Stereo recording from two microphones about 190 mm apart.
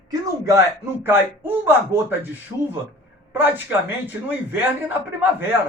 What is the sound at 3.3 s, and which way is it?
A man's voice, 10° right (ahead or behind).